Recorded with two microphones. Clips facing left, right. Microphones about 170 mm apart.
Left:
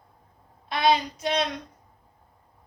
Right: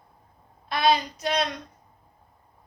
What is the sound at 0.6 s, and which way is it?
Speech, 25° left (ahead or behind).